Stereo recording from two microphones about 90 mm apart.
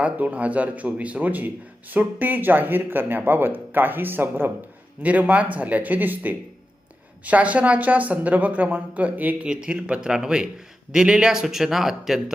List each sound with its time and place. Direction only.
0.0 s speech: 15° right (ahead or behind)